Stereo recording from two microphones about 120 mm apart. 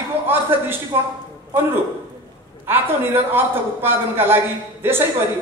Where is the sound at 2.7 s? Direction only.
20° right (ahead or behind).